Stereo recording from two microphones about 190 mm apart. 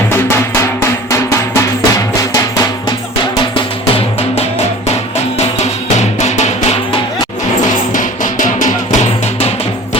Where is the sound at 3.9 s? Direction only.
30° left (ahead or behind).